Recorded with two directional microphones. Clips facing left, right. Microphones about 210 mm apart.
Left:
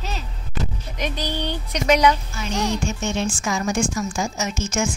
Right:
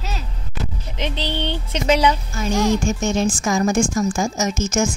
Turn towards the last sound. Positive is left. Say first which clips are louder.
# right 4 dB
turn(degrees=-45)  # may be behind; listen again after turning